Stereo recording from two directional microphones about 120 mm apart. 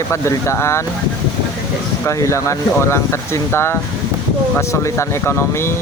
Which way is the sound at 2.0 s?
25° left (ahead or behind).